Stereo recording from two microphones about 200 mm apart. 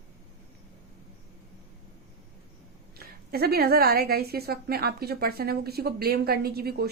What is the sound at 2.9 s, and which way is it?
A woman's voice, 50° right (ahead or behind).